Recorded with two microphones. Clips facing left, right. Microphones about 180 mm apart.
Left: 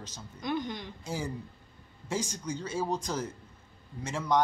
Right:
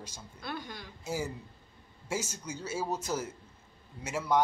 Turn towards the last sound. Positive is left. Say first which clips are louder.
# left 1 dB
turn(degrees=-10)  # may be behind; listen again after turning